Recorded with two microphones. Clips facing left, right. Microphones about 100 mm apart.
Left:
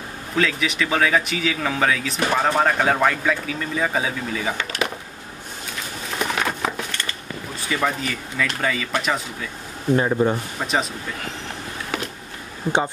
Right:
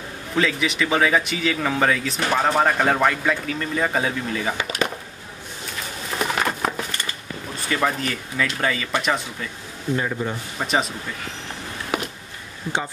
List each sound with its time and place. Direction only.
0.4 s speech: centre (ahead or behind)
4.6 s a sound: 10° right (ahead or behind)
6.1 s wood: centre (ahead or behind)
7.7 s speech: centre (ahead or behind)
9.9 s speech: 30° left (ahead or behind)
10.6 s speech: centre (ahead or behind)
11.9 s a sound: 10° right (ahead or behind)
12.7 s speech: 55° left (ahead or behind)